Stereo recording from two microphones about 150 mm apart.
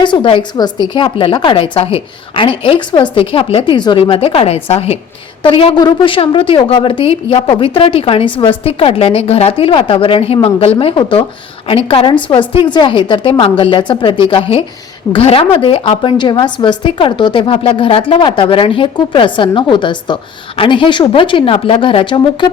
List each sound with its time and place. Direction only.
0.0 s a woman's voice: 35° left (ahead or behind)